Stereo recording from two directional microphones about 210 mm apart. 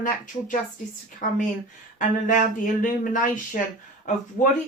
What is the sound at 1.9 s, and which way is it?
A woman's voice, 40° left (ahead or behind).